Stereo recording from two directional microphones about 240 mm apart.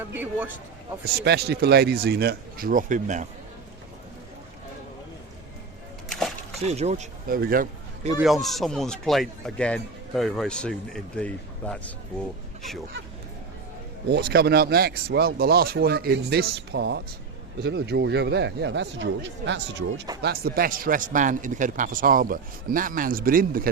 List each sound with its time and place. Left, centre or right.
0.0 s speech: centre
1.2 s a man's voice: right
6.1 s a sound: centre
6.7 s speech: right
8.2 s a man's voice: centre
14.1 s a man's voice: right